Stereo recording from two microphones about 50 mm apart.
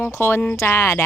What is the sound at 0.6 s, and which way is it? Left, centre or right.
Speech, left.